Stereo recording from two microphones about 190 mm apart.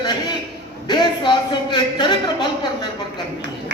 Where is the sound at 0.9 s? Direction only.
25° left (ahead or behind).